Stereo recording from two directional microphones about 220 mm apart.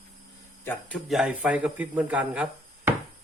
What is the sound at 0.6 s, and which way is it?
A man's voice, 10° left (ahead or behind).